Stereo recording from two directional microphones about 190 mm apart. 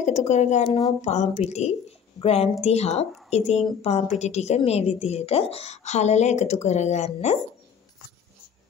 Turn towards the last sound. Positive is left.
turn(degrees=35)  # may be behind; listen again after turning